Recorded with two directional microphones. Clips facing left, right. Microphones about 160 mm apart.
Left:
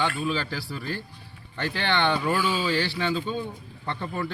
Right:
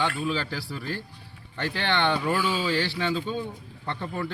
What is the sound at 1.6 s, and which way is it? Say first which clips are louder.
Speech: even; 20° right (ahead or behind).